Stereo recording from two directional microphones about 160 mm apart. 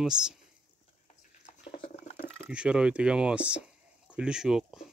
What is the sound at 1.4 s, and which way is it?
Dog, 50° left (ahead or behind).